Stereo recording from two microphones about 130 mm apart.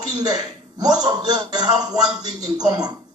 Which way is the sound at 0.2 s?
30° right (ahead or behind).